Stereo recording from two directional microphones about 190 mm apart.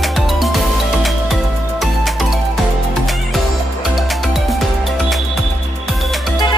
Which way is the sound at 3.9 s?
Centre (ahead or behind).